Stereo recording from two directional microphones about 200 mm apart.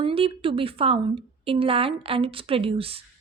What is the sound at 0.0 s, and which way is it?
A woman's voice, 25° right (ahead or behind).